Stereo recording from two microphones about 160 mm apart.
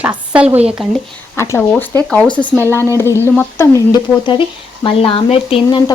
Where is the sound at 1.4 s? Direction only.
15° left (ahead or behind).